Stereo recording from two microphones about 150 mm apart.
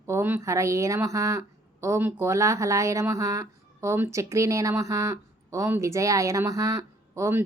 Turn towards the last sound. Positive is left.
turn(degrees=-15)  # may be behind; listen again after turning